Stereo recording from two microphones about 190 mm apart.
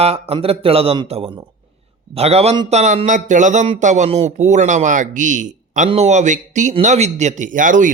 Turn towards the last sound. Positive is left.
turn(degrees=-45)  # may be behind; listen again after turning